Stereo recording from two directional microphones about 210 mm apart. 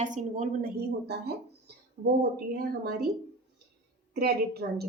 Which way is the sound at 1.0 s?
50° right (ahead or behind).